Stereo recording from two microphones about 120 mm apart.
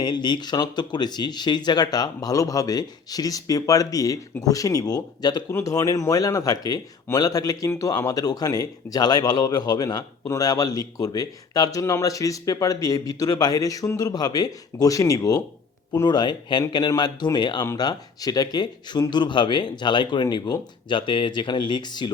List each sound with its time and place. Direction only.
0.0 s speech: 35° left (ahead or behind)